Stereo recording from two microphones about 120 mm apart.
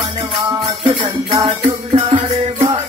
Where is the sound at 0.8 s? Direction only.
45° right (ahead or behind).